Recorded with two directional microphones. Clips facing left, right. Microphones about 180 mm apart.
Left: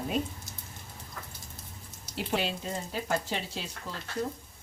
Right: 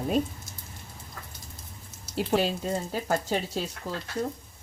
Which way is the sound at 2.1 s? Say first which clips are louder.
Right 6 dB; 40° right (ahead or behind).